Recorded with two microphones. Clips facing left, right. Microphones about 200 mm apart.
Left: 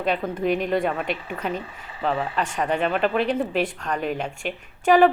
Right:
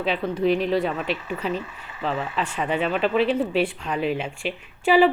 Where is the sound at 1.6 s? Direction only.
30° left (ahead or behind).